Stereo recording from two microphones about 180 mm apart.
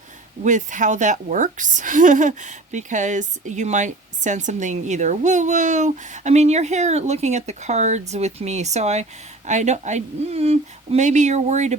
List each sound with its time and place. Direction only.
0.4 s a woman's voice: 45° right (ahead or behind)